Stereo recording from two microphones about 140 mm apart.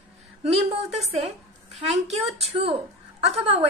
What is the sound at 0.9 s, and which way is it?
Speech, 50° right (ahead or behind).